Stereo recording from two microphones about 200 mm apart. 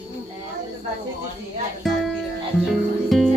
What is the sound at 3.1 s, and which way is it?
Music, centre (ahead or behind).